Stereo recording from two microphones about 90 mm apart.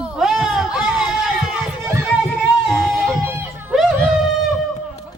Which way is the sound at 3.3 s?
25° right (ahead or behind).